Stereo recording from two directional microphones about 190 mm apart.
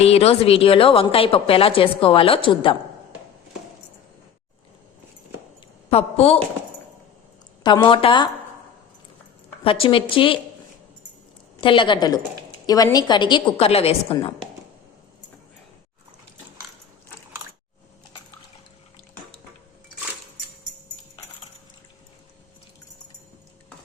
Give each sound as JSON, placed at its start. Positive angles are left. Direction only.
{"t": 0.0, "sound": "a woman's voice", "side_deg": 30}
{"t": 5.9, "sound": "a woman's voice", "side_deg": 35}
{"t": 7.6, "sound": "a woman's voice", "side_deg": 25}
{"t": 9.6, "sound": "a woman's voice", "side_deg": 30}
{"t": 11.6, "sound": "a woman's voice", "side_deg": 25}